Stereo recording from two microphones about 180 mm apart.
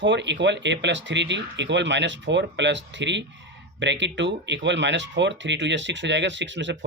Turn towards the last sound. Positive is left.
turn(degrees=-85)